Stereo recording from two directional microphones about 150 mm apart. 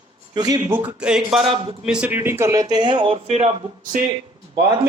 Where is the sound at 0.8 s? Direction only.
10° right (ahead or behind); by 3.5 s 45° right (ahead or behind).